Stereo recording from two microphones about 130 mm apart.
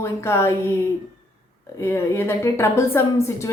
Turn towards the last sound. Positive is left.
turn(degrees=20)  # may be behind; listen again after turning